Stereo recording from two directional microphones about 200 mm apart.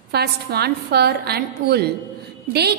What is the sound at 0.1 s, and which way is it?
A woman's voice, 55° right (ahead or behind).